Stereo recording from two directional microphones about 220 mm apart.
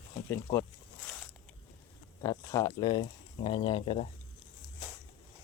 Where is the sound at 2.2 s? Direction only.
15° left (ahead or behind).